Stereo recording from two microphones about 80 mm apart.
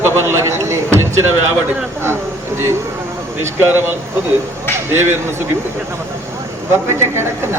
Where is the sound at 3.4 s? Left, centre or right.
Right.